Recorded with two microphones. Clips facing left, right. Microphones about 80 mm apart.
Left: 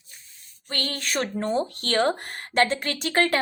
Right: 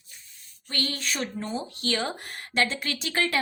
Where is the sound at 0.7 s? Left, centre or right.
Left.